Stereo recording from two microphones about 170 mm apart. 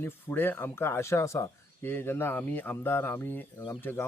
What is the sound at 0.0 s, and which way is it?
Speech, 10° left (ahead or behind).